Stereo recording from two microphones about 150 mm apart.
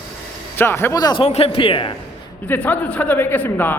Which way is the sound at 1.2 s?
40° left (ahead or behind).